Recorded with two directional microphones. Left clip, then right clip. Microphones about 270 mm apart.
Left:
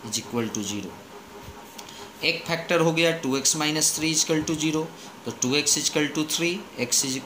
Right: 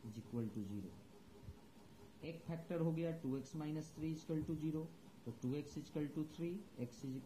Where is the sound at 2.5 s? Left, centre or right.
Centre.